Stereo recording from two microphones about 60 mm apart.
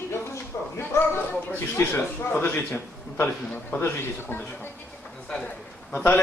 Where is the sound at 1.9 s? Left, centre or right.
Left.